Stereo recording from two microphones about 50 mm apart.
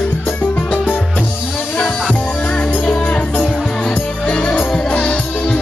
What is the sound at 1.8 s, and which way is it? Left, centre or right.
Music, left.